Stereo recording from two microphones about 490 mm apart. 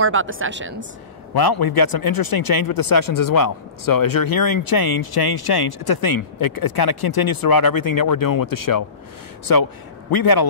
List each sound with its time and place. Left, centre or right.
0.0 s a woman's voice: right
1.3 s speech: left